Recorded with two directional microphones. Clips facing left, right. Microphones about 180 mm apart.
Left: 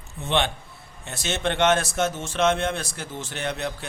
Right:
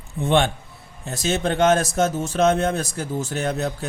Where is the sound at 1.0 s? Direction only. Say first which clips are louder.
Right 4 dB; 35° right (ahead or behind).